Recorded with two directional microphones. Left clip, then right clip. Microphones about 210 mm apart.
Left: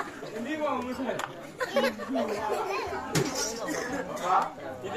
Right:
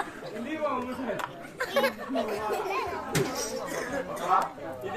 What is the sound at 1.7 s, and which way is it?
Speech, 40° right (ahead or behind).